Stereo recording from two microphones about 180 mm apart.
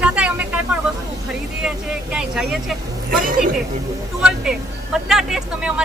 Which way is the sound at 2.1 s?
5° right (ahead or behind).